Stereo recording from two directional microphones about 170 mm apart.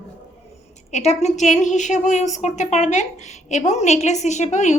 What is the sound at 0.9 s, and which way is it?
A woman's voice, 40° left (ahead or behind).